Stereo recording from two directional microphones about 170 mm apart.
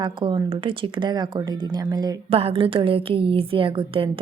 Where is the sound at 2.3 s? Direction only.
35° right (ahead or behind).